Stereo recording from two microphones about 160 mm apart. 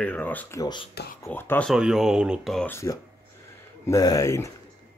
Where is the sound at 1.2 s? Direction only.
15° left (ahead or behind).